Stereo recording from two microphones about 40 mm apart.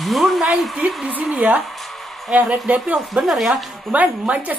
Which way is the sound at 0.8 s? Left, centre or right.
Right.